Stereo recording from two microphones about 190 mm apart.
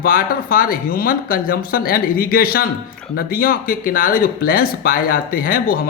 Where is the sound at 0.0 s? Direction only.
50° left (ahead or behind).